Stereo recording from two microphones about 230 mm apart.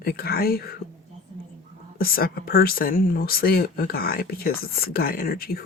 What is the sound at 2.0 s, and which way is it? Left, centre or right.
Speech, left.